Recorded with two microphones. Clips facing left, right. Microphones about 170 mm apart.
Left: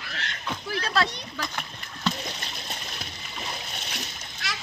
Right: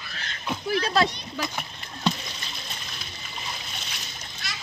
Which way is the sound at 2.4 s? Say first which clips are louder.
Left 2 dB; 65° left (ahead or behind).